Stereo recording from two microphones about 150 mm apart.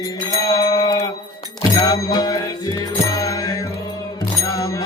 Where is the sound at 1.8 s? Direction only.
25° left (ahead or behind).